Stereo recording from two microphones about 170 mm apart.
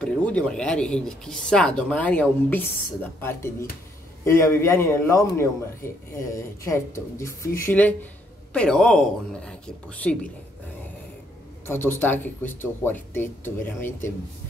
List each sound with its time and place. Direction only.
0.0 s speech: 5° left (ahead or behind)
11.6 s speech: 15° left (ahead or behind)